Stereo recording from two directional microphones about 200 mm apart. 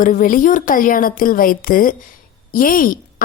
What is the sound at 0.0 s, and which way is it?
Speech, 40° left (ahead or behind).